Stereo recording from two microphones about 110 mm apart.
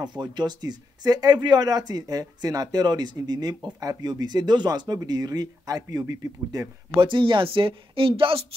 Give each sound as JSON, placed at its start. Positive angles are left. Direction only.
{"t": 0.0, "sound": "speech", "side_deg": -40}
{"t": 7.0, "sound": "speech", "side_deg": -50}